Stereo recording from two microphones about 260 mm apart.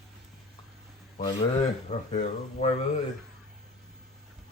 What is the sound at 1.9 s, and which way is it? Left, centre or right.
Speech, left.